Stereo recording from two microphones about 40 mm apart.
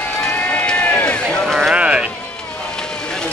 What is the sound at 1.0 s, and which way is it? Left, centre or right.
Run, left.